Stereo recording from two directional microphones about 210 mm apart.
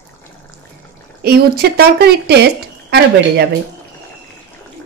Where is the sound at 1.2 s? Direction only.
45° right (ahead or behind).